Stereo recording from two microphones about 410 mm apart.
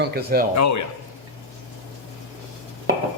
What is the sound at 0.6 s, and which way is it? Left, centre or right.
Speech, left.